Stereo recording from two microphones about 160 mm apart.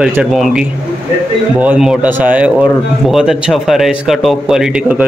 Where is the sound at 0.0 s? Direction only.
5° right (ahead or behind).